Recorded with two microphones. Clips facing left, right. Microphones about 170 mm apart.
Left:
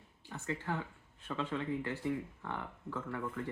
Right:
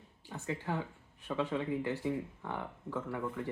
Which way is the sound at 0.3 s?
15° right (ahead or behind).